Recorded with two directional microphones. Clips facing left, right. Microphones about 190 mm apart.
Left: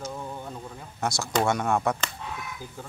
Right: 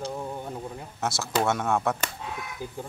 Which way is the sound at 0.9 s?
5° right (ahead or behind).